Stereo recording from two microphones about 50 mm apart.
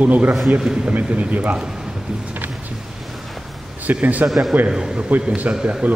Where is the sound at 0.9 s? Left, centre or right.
Right.